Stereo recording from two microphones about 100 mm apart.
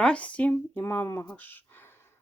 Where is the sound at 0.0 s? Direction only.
10° left (ahead or behind).